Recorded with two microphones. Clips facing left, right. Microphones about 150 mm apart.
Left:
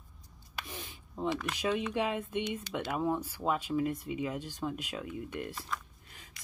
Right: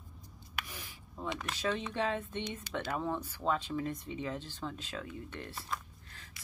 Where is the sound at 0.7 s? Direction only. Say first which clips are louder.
Left 4 dB; 20° left (ahead or behind).